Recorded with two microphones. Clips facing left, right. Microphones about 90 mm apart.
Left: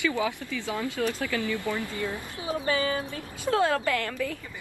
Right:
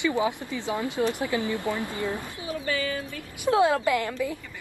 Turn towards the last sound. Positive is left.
turn(degrees=-15)  # may be behind; listen again after turning